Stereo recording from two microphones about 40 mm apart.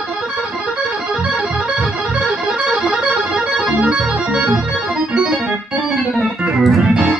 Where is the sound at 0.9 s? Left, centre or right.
Right.